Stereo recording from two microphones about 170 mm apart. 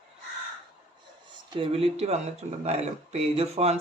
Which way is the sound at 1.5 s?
35° right (ahead or behind).